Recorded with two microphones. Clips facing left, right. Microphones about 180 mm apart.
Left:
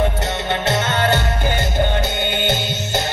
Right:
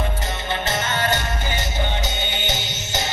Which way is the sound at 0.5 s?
70° left (ahead or behind).